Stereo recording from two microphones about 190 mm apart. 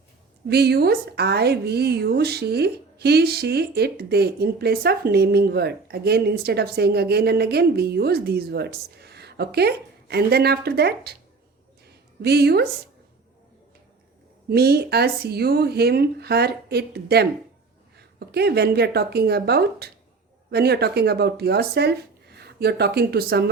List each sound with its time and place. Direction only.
0.4 s a woman's voice: 60° right (ahead or behind)
12.2 s a woman's voice: 60° right (ahead or behind)
14.5 s a woman's voice: 55° right (ahead or behind)
18.3 s a woman's voice: 60° right (ahead or behind)